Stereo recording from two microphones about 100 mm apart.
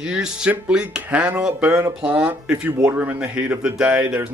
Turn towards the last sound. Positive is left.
turn(degrees=-15)  # may be behind; listen again after turning